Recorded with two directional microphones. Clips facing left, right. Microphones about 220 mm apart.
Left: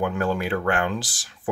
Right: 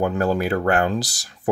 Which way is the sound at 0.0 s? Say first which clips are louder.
Right 4 dB; 40° right (ahead or behind).